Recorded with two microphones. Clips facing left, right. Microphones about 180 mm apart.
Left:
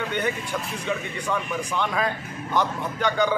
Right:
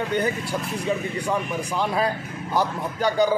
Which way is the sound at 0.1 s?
35° right (ahead or behind).